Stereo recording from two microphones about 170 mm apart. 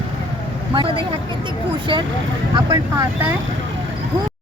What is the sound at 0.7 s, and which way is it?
Speech, 25° right (ahead or behind).